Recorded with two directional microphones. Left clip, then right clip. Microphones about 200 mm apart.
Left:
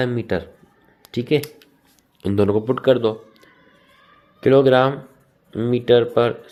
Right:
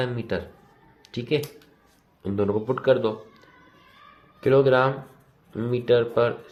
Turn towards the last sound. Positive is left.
turn(degrees=40)  # may be behind; listen again after turning